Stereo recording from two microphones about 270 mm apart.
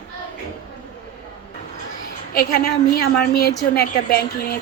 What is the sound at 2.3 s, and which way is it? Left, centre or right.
A woman's voice, left.